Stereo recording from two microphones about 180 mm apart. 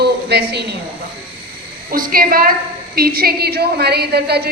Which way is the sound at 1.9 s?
50° right (ahead or behind).